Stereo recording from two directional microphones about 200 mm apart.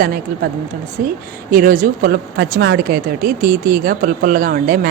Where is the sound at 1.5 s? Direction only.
45° right (ahead or behind).